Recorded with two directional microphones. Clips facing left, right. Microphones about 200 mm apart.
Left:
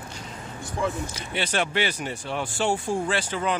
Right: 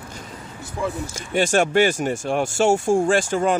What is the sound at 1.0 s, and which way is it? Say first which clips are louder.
Speech: right 8 dB; 45° right (ahead or behind).